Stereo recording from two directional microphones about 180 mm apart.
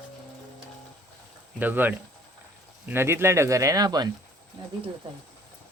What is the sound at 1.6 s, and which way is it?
Speech, 10° right (ahead or behind).